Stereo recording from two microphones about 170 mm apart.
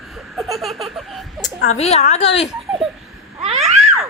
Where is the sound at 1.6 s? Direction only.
40° left (ahead or behind).